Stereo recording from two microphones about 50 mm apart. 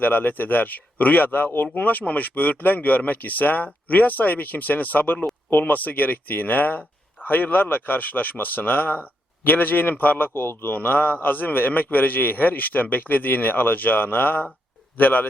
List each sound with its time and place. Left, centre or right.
0.0 s a man's voice: left
10.8 s a man's voice: left